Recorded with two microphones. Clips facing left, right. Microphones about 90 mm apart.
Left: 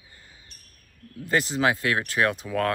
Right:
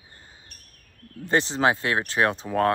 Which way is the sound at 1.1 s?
30° right (ahead or behind).